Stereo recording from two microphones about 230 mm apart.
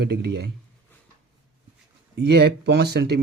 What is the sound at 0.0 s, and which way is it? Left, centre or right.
Speech, right.